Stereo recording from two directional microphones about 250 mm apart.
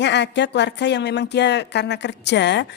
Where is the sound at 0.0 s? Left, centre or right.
Left.